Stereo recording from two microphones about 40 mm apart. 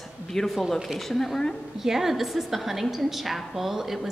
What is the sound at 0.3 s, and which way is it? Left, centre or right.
Speech, centre.